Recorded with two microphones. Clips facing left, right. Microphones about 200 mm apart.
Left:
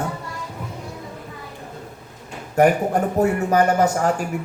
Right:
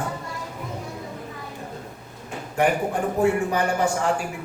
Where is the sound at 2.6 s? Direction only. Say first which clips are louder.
Left 5 dB; 40° left (ahead or behind).